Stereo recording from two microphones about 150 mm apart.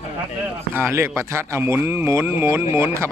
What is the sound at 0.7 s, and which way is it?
Speech, 15° right (ahead or behind).